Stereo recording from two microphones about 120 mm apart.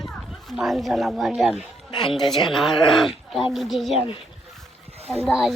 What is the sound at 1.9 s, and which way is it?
Speech, 45° left (ahead or behind).